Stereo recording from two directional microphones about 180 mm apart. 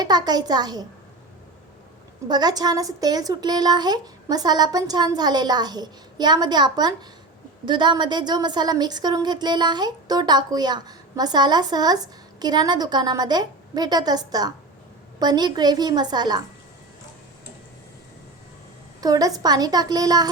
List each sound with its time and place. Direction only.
0.0 s a woman's voice: 25° right (ahead or behind)
2.2 s a woman's voice: 20° right (ahead or behind)
18.9 s a woman's voice: 20° right (ahead or behind)